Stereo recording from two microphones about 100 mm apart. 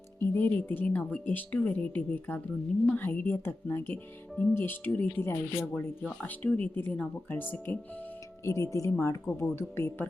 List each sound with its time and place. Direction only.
0.2 s speech: 20° left (ahead or behind)